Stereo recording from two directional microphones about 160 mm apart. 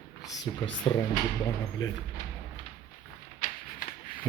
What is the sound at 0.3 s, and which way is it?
Speech, 25° left (ahead or behind).